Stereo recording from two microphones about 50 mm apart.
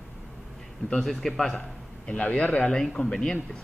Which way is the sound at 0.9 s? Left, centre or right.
Centre.